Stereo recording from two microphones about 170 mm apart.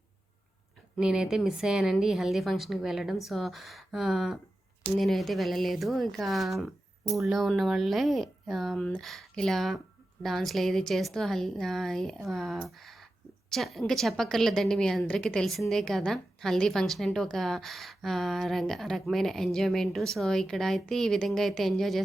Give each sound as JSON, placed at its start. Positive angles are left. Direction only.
{"t": 0.9, "sound": "a woman's voice", "side_deg": -5}